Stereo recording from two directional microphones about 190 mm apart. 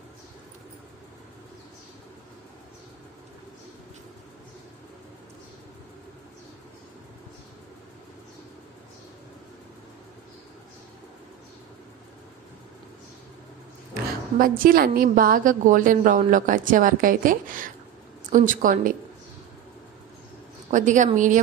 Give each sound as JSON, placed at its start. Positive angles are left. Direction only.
{"t": 14.4, "sound": "a woman's voice", "side_deg": -50}
{"t": 20.7, "sound": "speech", "side_deg": -40}